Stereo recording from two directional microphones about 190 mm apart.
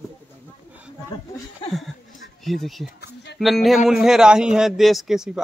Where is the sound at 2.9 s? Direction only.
60° left (ahead or behind).